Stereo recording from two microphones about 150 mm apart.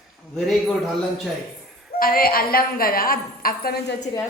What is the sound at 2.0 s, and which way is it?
A woman's voice, 80° left.